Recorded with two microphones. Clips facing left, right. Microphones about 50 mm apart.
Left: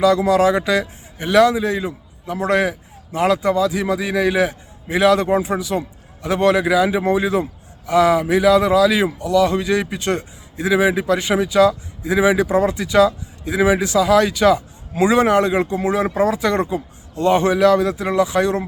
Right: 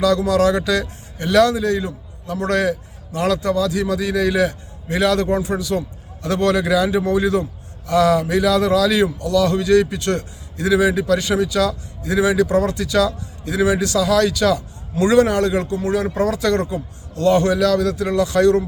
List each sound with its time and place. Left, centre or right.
0.0 s a man's voice: centre